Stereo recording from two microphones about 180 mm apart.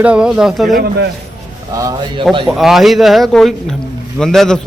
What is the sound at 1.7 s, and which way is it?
Speech, 20° right (ahead or behind).